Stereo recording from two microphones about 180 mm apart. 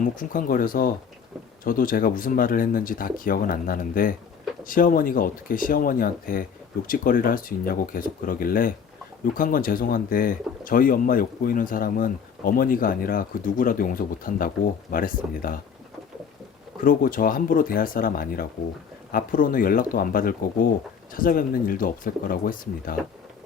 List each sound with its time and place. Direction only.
0.0 s speech: 50° left (ahead or behind)
16.8 s speech: 50° left (ahead or behind)